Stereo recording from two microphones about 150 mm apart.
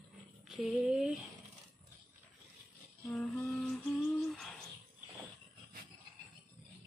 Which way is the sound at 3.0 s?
Centre (ahead or behind).